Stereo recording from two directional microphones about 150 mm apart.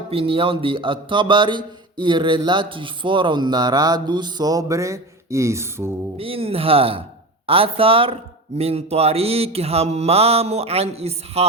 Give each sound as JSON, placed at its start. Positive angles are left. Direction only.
{"t": 0.1, "sound": "mantra", "side_deg": -40}
{"t": 6.1, "sound": "mantra", "side_deg": -40}
{"t": 7.4, "sound": "speech", "side_deg": -40}